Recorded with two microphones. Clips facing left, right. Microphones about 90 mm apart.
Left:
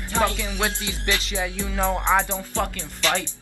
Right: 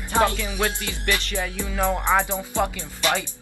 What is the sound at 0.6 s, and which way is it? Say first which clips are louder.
Music: right 1 dB; 15° left (ahead or behind).